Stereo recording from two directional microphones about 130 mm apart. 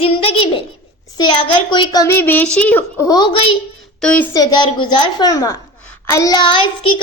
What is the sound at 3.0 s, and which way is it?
Speech, 30° left (ahead or behind).